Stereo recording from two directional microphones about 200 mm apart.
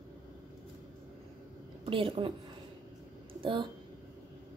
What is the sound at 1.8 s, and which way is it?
Speech, 25° right (ahead or behind).